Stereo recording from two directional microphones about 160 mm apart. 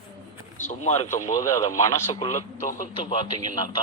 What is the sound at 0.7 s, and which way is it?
Speech, 45° left (ahead or behind).